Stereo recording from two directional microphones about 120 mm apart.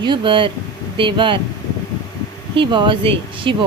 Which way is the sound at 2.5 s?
45° right (ahead or behind).